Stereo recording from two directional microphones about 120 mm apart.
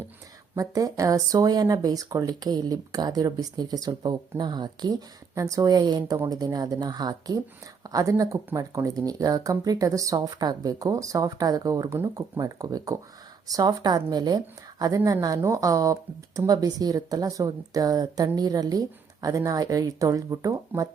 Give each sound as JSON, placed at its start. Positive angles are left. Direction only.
{"t": 0.5, "sound": "speech", "side_deg": -30}